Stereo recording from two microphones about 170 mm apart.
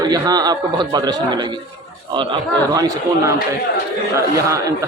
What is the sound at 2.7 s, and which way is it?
Speech, 20° right (ahead or behind).